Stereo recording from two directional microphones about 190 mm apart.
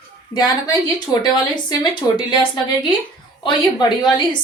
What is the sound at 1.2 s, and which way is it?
Speech, 20° left (ahead or behind).